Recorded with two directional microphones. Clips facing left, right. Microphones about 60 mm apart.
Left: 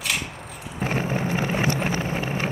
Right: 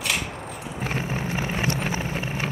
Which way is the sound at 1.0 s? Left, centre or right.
Left.